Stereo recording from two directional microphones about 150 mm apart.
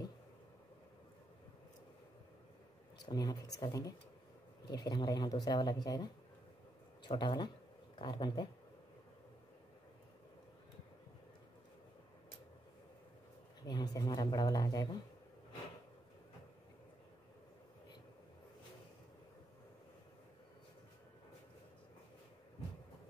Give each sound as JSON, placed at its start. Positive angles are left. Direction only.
{"t": 3.1, "sound": "speech", "side_deg": 25}
{"t": 13.7, "sound": "speech", "side_deg": 25}